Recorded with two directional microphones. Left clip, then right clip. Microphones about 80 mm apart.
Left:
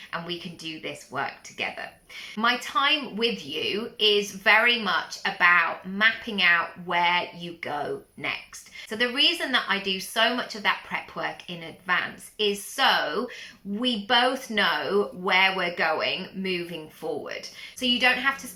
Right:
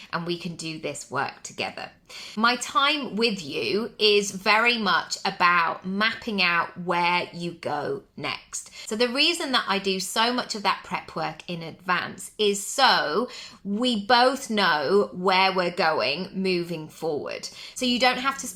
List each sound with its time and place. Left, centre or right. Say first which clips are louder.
0.1 s speech: right 3 dB; right
16.0 s a woman's voice: right 2 dB; right